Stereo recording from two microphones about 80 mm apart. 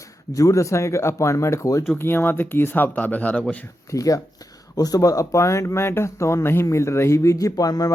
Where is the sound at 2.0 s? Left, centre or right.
Left.